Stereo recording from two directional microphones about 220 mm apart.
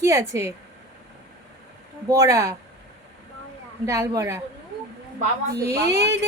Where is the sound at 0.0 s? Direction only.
15° right (ahead or behind).